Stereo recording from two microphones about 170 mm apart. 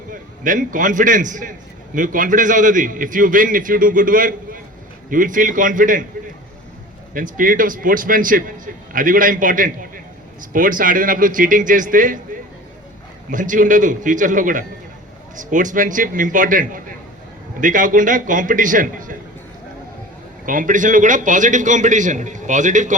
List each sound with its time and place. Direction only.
0.1 s a man's voice: 50° right (ahead or behind)
7.1 s a man's voice: 55° right (ahead or behind)
13.3 s a man's voice: 50° right (ahead or behind)
20.4 s a man's voice: 55° right (ahead or behind)